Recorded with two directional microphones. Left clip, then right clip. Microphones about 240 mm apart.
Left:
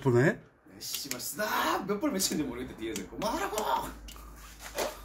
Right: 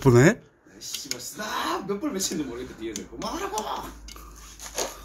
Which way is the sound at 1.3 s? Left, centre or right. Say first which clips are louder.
Even; left.